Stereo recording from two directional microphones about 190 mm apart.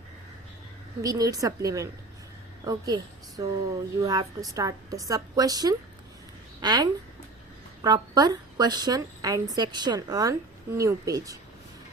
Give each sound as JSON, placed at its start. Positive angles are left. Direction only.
{"t": 1.0, "sound": "a woman's voice", "side_deg": -20}